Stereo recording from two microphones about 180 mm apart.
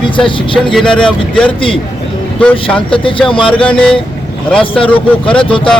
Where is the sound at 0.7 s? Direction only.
5° left (ahead or behind).